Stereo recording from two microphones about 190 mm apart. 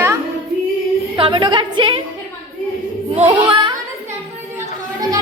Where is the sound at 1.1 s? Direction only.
25° right (ahead or behind).